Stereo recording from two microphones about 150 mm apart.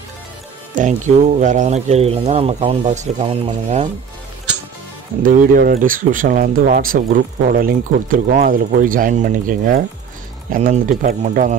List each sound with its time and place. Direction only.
0.7 s speech: 55° right (ahead or behind)
5.2 s speech: 65° right (ahead or behind)